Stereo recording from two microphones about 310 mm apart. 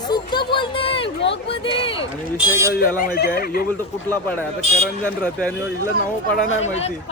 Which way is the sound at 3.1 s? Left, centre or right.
Left.